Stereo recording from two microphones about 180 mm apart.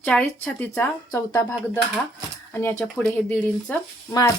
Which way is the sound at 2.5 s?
15° left (ahead or behind).